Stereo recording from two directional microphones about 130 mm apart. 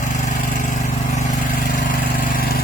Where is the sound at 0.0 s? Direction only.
70° left (ahead or behind); by 2.0 s 90° left.